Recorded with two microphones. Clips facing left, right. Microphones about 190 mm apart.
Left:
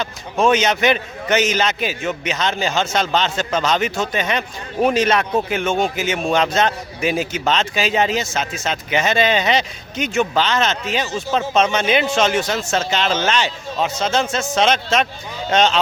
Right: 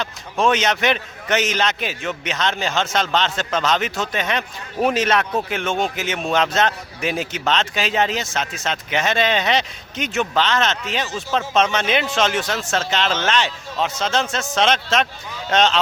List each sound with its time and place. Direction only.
0.0 s a man's voice: centre (ahead or behind)